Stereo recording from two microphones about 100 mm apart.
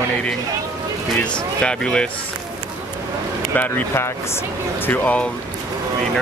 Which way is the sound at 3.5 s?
20° left (ahead or behind).